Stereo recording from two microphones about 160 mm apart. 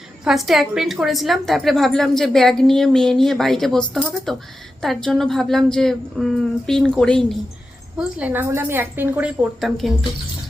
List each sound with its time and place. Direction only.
0.3 s a woman's voice: centre (ahead or behind)
7.9 s a woman's voice: 10° right (ahead or behind)